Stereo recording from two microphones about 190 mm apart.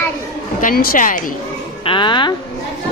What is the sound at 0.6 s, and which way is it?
Speech, 50° left (ahead or behind).